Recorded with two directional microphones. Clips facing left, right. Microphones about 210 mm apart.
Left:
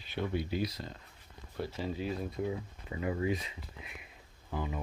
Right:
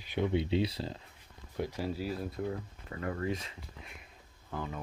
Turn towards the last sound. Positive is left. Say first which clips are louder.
# left 2 dB
turn(degrees=5)  # may be behind; listen again after turning